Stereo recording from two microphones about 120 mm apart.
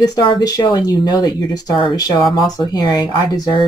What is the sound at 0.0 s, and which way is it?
Speech, 35° left (ahead or behind).